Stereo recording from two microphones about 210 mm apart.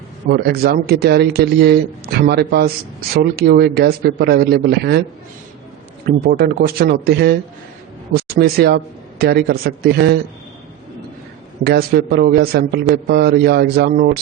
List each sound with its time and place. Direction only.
0.3 s speech: 50° right (ahead or behind)
6.1 s speech: 45° right (ahead or behind)
11.6 s speech: 50° right (ahead or behind)